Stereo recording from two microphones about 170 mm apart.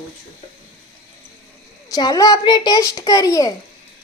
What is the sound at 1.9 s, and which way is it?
A child's voice, 20° left (ahead or behind).